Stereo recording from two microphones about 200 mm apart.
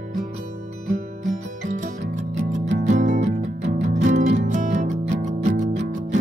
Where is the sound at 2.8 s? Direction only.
40° right (ahead or behind).